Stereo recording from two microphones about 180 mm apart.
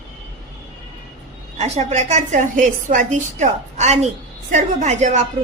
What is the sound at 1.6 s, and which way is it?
A woman's voice, 35° right (ahead or behind).